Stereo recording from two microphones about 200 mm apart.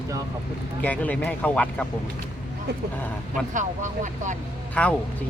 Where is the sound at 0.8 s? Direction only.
10° left (ahead or behind).